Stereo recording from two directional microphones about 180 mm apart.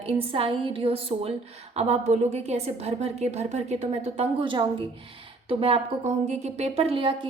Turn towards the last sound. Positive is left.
turn(degrees=-30)  # may be behind; listen again after turning